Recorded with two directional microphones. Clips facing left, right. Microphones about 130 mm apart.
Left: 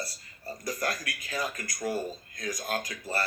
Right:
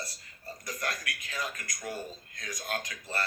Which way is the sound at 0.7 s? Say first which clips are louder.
Even; 35° left (ahead or behind).